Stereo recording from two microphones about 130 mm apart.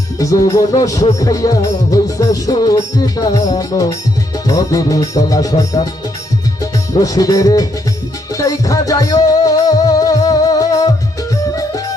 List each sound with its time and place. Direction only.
0.2 s music: 25° left (ahead or behind)